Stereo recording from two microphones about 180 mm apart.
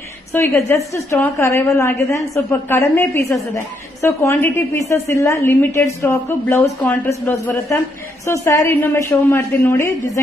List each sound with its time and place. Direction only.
0.3 s a woman's voice: 15° left (ahead or behind)